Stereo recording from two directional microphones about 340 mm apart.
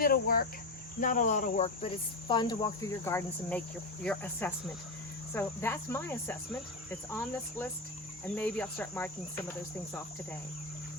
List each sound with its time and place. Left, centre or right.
0.0 s speech: left
0.9 s cricket: left; by 6.3 s centre
8.2 s cricket: centre